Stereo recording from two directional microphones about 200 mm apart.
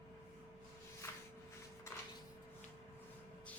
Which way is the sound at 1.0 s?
15° left (ahead or behind).